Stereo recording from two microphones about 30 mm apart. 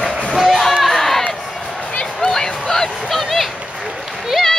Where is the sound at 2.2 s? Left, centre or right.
Centre.